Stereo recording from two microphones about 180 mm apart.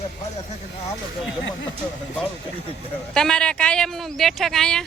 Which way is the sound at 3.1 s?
5° left (ahead or behind).